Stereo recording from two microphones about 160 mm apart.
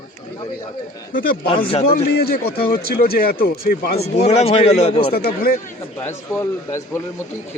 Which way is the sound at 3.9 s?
40° left (ahead or behind).